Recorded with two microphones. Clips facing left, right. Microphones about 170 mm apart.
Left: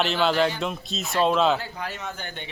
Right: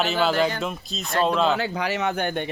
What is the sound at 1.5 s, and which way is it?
Speech, 90° right.